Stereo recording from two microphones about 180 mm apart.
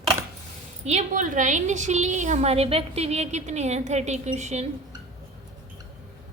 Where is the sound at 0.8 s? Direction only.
40° right (ahead or behind).